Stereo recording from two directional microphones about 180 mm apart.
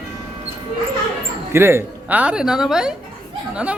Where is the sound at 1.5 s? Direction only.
15° right (ahead or behind).